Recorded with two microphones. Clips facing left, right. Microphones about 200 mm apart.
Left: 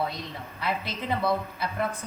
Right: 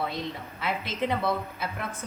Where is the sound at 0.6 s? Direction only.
Centre (ahead or behind).